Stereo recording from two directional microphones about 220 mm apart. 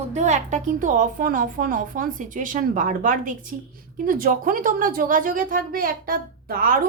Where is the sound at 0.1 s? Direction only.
30° right (ahead or behind).